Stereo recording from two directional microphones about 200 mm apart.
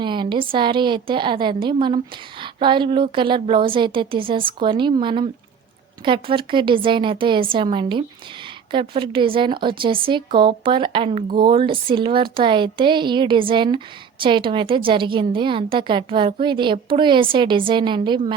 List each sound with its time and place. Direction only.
0.0 s speech: 25° right (ahead or behind)